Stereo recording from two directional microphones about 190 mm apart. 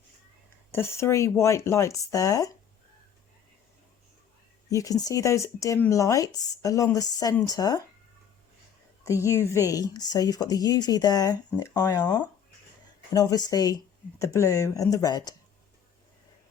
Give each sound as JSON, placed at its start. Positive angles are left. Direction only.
{"t": 0.7, "sound": "speech", "side_deg": 15}
{"t": 4.7, "sound": "speech", "side_deg": 20}
{"t": 9.0, "sound": "a woman's voice", "side_deg": 15}